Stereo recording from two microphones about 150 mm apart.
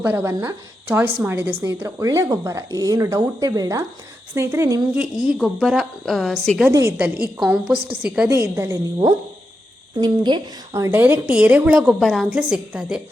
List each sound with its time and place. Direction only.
0.0 s a woman's voice: 15° right (ahead or behind)
5.3 s a woman's voice: centre (ahead or behind)
6.7 s a woman's voice: 15° right (ahead or behind)
8.3 s a woman's voice: 15° right (ahead or behind)
10.8 s a woman's voice: 15° right (ahead or behind)